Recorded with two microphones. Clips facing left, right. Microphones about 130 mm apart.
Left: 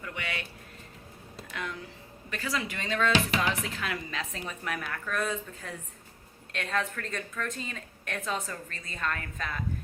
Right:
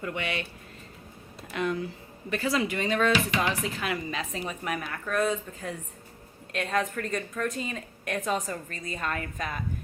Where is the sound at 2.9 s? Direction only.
15° right (ahead or behind).